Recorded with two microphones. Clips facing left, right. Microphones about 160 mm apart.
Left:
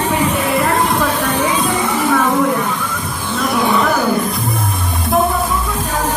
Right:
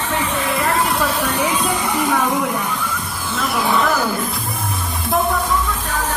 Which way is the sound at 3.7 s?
Centre (ahead or behind).